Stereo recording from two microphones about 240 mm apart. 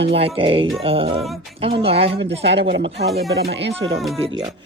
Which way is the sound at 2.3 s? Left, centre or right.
Right.